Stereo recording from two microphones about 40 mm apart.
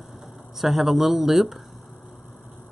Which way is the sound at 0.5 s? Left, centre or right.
Centre.